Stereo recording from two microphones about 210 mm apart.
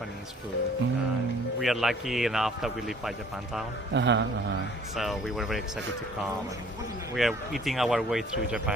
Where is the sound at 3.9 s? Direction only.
55° right (ahead or behind).